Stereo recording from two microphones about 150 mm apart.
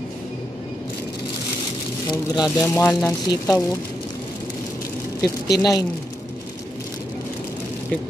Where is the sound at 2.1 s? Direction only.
25° left (ahead or behind).